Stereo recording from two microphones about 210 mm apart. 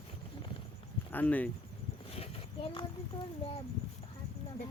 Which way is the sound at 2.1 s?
25° left (ahead or behind).